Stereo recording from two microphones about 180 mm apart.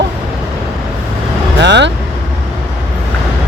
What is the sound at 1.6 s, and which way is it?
Speech, 75° right (ahead or behind).